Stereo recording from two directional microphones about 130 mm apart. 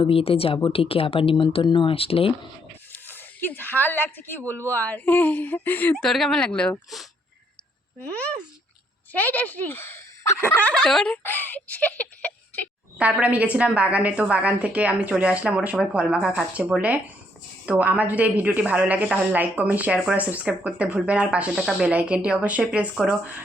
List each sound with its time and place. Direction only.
0.0 s a woman's voice: 45° left (ahead or behind)
2.9 s speech: 15° left (ahead or behind)
13.0 s a woman's voice: 10° right (ahead or behind)